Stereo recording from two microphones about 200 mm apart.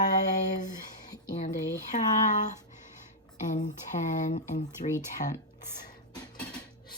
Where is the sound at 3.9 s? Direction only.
35° left (ahead or behind).